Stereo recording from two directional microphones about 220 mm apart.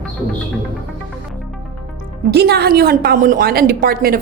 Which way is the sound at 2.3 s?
45° right (ahead or behind).